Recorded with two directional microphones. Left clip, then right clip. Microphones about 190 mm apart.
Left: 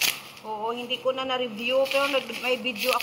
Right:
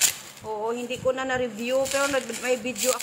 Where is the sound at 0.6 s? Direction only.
55° right (ahead or behind).